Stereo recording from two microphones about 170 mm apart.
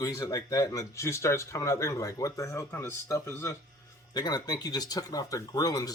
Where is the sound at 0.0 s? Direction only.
20° left (ahead or behind).